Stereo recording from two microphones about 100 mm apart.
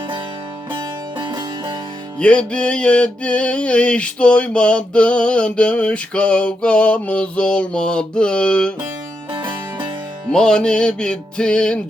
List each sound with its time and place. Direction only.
1.2 s music: 50° right (ahead or behind)
2.1 s music: 10° left (ahead or behind)
9.3 s music: 50° right (ahead or behind)
10.3 s music: 10° left (ahead or behind)